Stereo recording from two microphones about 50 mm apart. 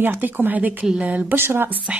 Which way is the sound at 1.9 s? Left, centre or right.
Right.